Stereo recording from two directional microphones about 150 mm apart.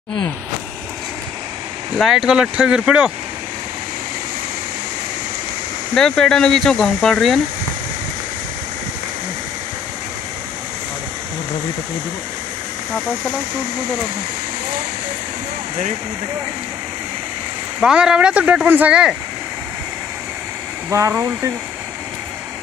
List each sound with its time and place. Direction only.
2.0 s speech: centre (ahead or behind)
5.9 s speech: 5° left (ahead or behind)
17.7 s speech: 5° right (ahead or behind)
21.1 s speech: 20° right (ahead or behind)